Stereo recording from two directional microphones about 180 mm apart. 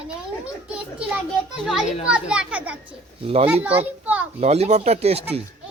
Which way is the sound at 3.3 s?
35° right (ahead or behind).